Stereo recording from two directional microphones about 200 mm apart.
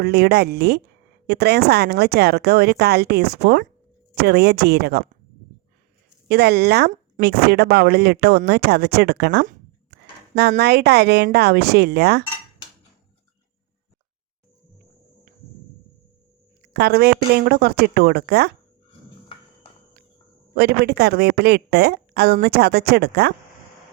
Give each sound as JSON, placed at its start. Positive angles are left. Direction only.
{"t": 0.0, "sound": "speech", "side_deg": -55}
{"t": 6.2, "sound": "speech", "side_deg": -55}
{"t": 10.6, "sound": "speech", "side_deg": -55}
{"t": 16.7, "sound": "speech", "side_deg": -55}
{"t": 20.6, "sound": "speech", "side_deg": -55}